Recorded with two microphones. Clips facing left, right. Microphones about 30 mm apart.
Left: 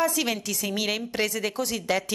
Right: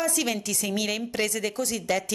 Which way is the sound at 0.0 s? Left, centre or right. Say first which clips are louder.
Left 2 dB; centre.